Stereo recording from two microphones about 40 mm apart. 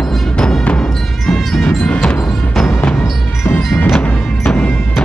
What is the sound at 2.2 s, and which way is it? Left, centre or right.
Music, centre.